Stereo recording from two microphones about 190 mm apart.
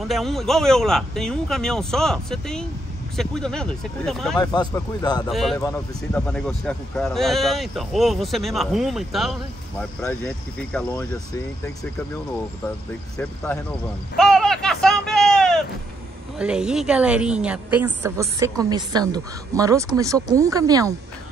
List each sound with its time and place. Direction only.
0.1 s speech: centre (ahead or behind)
4.4 s a man's voice: 20° left (ahead or behind)
5.3 s speech: centre (ahead or behind)
14.1 s a sound: centre (ahead or behind)
16.3 s a woman's voice: 5° right (ahead or behind)